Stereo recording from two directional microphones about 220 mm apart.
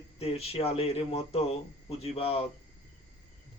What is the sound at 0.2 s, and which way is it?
Speech, 25° left (ahead or behind).